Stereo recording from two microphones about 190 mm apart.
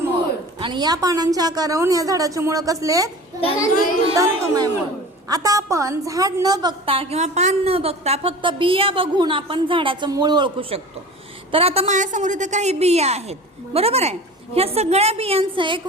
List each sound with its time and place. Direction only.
0.6 s a woman's voice: 25° right (ahead or behind)
4.2 s a woman's voice: 20° right (ahead or behind)